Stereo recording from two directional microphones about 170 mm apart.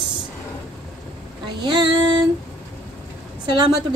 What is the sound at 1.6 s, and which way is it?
Speech, 25° right (ahead or behind).